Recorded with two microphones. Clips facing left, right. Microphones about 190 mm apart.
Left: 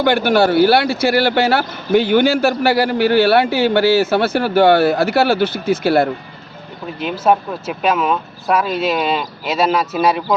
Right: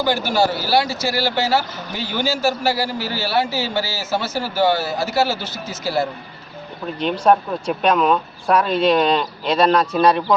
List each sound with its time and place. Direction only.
0.0 s speech: 65° left (ahead or behind)
7.0 s speech: 5° left (ahead or behind)